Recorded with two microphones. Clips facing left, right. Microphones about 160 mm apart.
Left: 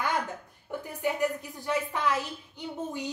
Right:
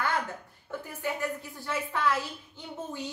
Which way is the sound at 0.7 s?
15° left (ahead or behind).